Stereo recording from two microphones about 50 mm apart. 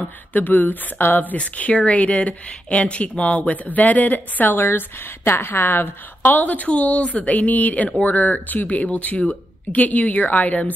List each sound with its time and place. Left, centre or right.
0.0 s speech: left
4.6 s speech: left